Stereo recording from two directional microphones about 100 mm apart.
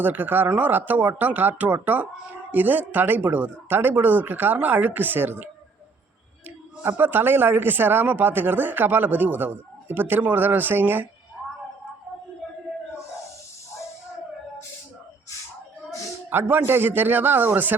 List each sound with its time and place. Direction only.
0.0 s speech: 20° right (ahead or behind)
6.8 s speech: 20° right (ahead or behind)
16.3 s speech: 20° right (ahead or behind)